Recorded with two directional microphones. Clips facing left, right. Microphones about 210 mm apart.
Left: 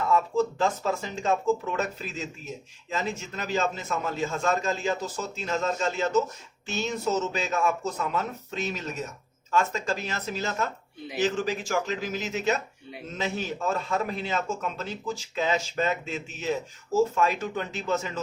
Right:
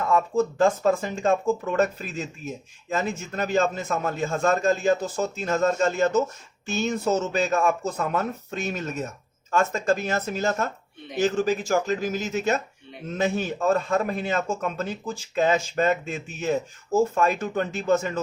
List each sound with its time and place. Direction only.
0.1 s a man's voice: 50° right (ahead or behind)